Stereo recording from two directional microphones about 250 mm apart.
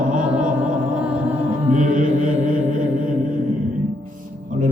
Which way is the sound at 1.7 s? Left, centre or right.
Right.